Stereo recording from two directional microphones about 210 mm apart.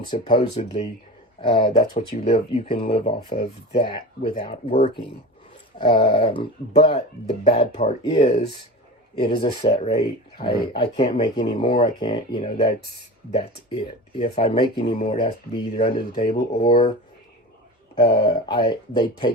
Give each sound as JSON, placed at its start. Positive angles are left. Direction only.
{"t": 0.1, "sound": "speech", "side_deg": 25}
{"t": 9.4, "sound": "speech", "side_deg": 30}
{"t": 17.9, "sound": "speech", "side_deg": 25}